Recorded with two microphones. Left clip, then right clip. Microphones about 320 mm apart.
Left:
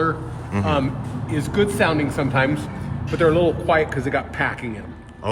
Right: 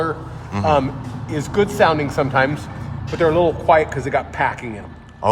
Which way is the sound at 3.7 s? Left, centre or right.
Right.